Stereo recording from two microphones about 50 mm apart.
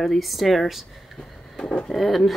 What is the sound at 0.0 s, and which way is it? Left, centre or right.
Speech, centre.